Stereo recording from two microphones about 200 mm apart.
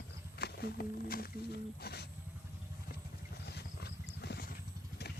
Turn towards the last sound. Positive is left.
turn(degrees=50)  # may be behind; listen again after turning